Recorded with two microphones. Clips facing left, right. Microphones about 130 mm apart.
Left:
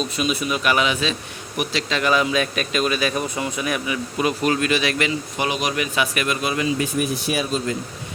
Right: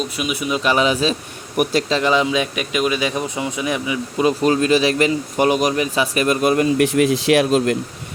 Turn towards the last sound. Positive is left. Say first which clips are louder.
# right 8 dB
turn(degrees=-80)